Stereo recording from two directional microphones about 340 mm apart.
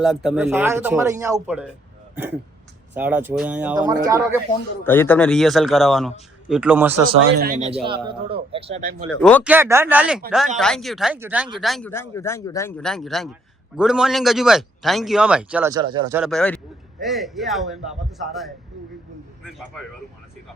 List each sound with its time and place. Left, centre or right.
0.0 s a man's voice: centre
2.9 s a man's voice: centre
4.8 s a man's voice: centre
7.3 s speech: right
9.2 s a man's voice: centre
11.6 s a man's voice: centre